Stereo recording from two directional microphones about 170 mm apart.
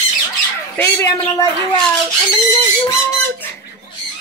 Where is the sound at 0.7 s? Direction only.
15° left (ahead or behind).